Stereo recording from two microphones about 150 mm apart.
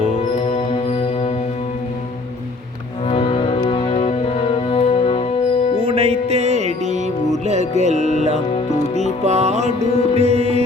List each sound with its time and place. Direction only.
3.1 s organ: 35° left (ahead or behind)
5.8 s music: 40° right (ahead or behind)